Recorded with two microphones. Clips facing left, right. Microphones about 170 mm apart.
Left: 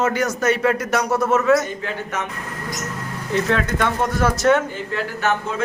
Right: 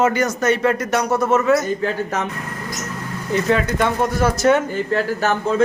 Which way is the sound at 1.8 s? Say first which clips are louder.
Right 5 dB; 35° right (ahead or behind).